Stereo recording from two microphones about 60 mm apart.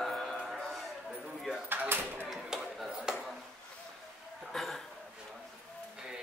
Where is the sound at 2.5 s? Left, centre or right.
Centre.